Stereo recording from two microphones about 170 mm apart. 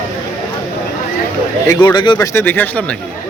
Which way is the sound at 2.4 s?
10° left (ahead or behind).